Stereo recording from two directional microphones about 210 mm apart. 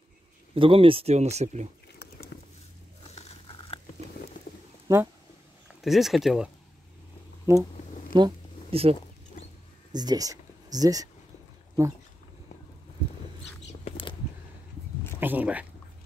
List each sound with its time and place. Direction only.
0.6 s speech: 25° right (ahead or behind)
2.0 s a sound: 50° left (ahead or behind)
3.2 s biting: 30° left (ahead or behind)
5.8 s speech: centre (ahead or behind)
7.5 s speech: 15° right (ahead or behind)
8.1 s a sound: 25° right (ahead or behind)
9.9 s speech: 20° right (ahead or behind)
13.8 s a sound: 25° left (ahead or behind)
15.1 s speech: 10° right (ahead or behind)